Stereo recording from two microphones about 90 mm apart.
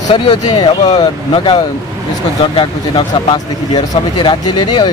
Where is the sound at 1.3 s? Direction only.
70° left (ahead or behind).